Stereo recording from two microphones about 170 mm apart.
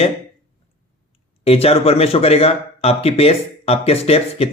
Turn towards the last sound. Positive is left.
turn(degrees=35)  # may be behind; listen again after turning